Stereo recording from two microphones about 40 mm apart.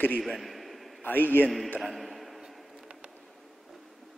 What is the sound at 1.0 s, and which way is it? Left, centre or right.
Speech, left.